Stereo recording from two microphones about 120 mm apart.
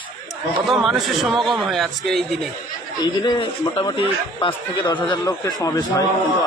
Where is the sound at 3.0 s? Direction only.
40° left (ahead or behind).